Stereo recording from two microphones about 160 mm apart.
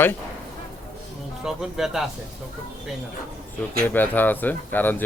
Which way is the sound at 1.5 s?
Centre (ahead or behind).